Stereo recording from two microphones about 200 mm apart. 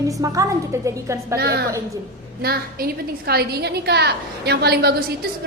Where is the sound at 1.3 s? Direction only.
55° right (ahead or behind).